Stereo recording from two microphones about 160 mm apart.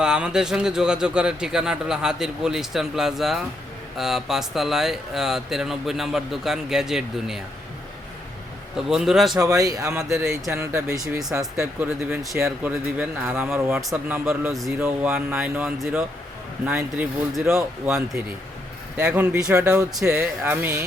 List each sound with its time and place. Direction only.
0.0 s speech: 5° right (ahead or behind)
8.9 s speech: centre (ahead or behind)
9.3 s speech: 20° right (ahead or behind)
18.9 s speech: 5° right (ahead or behind)